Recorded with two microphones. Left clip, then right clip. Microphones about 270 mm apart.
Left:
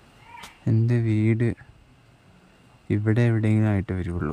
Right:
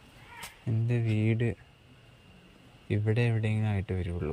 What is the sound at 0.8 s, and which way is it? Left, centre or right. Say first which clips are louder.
Speech: left 5 dB; centre.